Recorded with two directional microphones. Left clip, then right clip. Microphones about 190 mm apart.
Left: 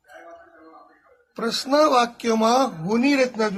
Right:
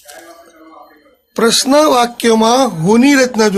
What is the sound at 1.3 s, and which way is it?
Speech, 45° right (ahead or behind).